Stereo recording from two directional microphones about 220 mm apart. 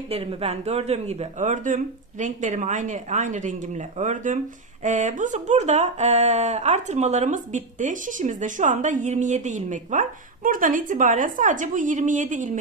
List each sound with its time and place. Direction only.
0.1 s speech: 25° right (ahead or behind)